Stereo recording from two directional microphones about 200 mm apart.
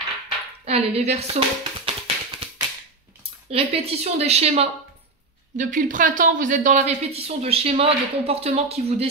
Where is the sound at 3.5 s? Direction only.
30° right (ahead or behind).